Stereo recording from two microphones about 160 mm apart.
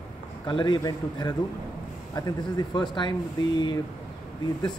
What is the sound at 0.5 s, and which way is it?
Speech, 30° left (ahead or behind).